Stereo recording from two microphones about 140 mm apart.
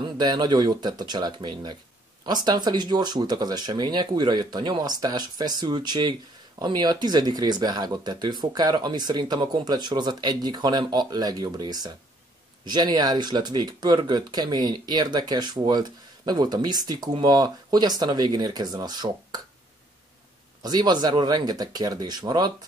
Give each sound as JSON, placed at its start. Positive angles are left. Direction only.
{"t": 0.0, "sound": "speech", "side_deg": -30}
{"t": 20.6, "sound": "speech", "side_deg": -30}